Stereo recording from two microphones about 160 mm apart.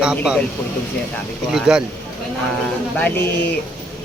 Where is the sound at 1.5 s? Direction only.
5° right (ahead or behind).